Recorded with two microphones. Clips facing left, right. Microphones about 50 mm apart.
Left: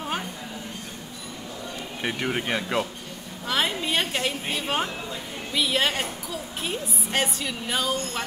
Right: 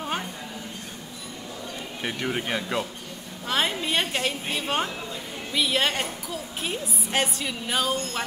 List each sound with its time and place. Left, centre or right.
2.0 s speech: centre
3.4 s a woman's voice: centre